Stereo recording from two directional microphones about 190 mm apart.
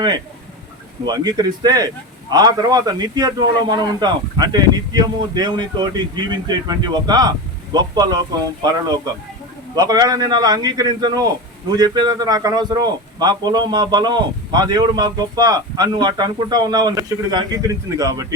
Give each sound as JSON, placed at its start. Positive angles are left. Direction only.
{"t": 1.0, "sound": "a man's voice", "side_deg": -20}
{"t": 9.7, "sound": "a man's voice", "side_deg": -20}